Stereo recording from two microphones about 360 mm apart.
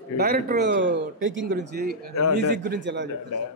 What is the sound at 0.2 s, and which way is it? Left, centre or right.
A man's voice, right.